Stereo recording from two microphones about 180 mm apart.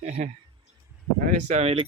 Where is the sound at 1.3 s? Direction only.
40° right (ahead or behind).